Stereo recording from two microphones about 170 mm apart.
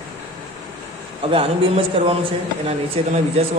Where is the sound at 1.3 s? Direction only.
30° right (ahead or behind).